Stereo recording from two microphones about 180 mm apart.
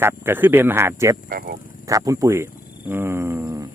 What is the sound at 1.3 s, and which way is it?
Speech, 50° right (ahead or behind).